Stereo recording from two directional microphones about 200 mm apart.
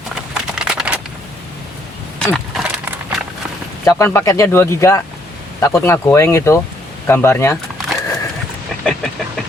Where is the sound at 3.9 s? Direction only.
15° left (ahead or behind).